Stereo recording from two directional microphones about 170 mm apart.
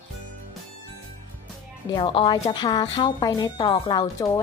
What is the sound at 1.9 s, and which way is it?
Speech, 30° left (ahead or behind).